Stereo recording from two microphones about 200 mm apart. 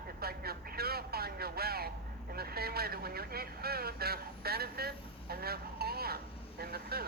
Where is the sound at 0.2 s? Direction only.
50° right (ahead or behind).